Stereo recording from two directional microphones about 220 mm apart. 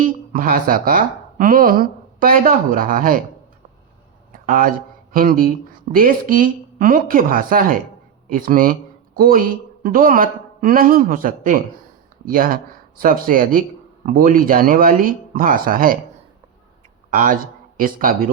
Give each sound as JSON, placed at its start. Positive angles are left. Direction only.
{"t": 0.0, "sound": "a woman's voice", "side_deg": -40}
{"t": 4.3, "sound": "a sound", "side_deg": -40}
{"t": 5.1, "sound": "a man's voice", "side_deg": -40}
{"t": 17.1, "sound": "speech", "side_deg": -40}